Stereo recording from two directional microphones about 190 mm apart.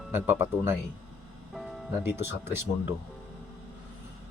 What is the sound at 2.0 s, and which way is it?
Speech, 10° right (ahead or behind).